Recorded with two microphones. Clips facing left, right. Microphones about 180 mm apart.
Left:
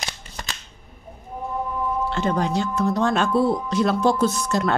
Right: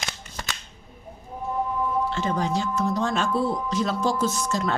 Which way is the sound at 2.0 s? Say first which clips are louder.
Left 3 dB; 65° left (ahead or behind).